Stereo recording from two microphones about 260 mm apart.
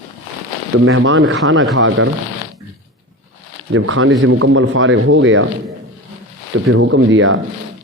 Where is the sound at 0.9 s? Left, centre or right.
Right.